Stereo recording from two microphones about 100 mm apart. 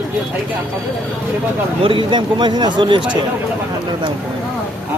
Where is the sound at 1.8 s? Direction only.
55° right (ahead or behind).